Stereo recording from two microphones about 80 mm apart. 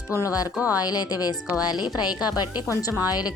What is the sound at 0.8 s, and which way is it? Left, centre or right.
Speech, left.